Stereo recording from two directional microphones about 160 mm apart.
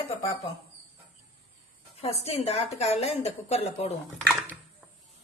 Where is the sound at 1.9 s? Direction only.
40° left (ahead or behind).